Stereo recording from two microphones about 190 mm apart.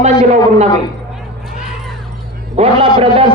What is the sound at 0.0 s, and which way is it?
Speech, 35° right (ahead or behind).